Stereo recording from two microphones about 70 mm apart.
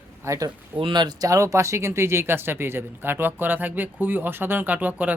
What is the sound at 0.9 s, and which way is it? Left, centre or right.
Speech, right.